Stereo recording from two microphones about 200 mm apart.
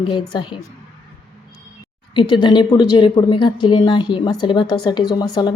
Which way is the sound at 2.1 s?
25° left (ahead or behind).